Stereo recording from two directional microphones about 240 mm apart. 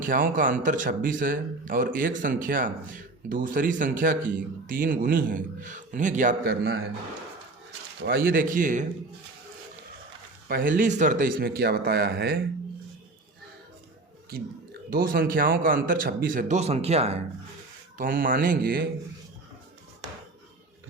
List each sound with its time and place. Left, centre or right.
0.0 s speech: right
8.0 s speech: right
10.5 s speech: right
14.3 s speech: right
17.9 s speech: right